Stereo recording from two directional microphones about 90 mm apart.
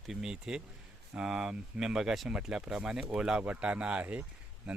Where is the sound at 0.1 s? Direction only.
5° right (ahead or behind).